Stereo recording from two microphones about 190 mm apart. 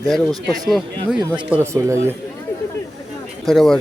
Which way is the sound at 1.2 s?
25° right (ahead or behind).